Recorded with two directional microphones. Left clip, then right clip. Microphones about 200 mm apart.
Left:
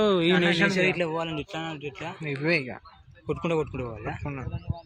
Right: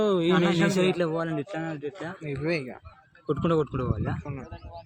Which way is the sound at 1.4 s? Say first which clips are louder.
Right 1 dB; 35° right (ahead or behind).